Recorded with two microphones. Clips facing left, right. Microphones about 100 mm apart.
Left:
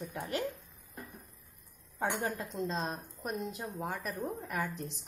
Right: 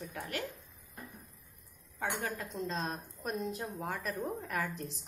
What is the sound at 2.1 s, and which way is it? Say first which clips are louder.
Speech: left 2 dB; 30° left (ahead or behind).